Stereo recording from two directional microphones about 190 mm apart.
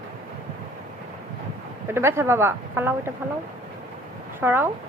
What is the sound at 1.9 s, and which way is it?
A woman's voice, 15° right (ahead or behind).